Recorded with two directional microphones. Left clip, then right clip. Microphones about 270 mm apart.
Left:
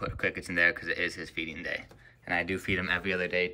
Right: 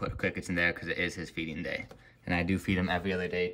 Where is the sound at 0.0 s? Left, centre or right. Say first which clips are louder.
Left 2 dB; left.